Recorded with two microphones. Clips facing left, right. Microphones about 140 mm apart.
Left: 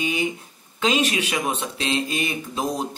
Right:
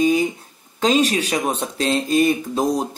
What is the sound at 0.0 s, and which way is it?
Speech, 40° right (ahead or behind).